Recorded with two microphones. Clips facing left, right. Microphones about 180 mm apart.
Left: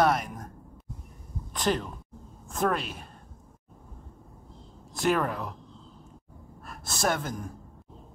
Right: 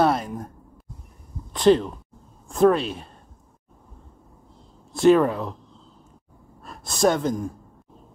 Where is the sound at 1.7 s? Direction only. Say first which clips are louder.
Right 11 dB; 25° right (ahead or behind).